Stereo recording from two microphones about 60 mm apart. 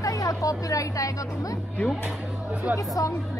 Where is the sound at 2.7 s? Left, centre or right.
Left.